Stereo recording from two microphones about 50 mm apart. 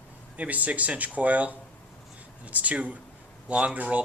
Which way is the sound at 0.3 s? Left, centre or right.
Right.